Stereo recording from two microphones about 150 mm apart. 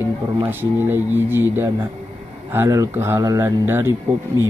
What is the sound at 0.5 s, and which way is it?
Speech, 15° right (ahead or behind).